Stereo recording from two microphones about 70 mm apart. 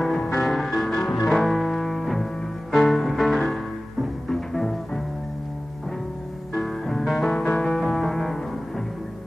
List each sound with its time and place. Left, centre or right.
0.0 s music: centre
6.5 s music: centre